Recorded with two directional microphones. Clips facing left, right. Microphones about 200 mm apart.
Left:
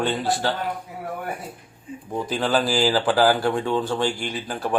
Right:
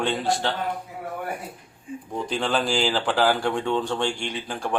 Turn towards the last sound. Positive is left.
turn(degrees=5)  # may be behind; listen again after turning